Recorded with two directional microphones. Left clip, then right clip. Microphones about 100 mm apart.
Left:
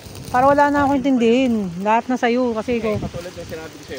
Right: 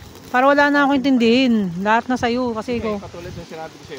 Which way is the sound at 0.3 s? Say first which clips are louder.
Even; 90° right.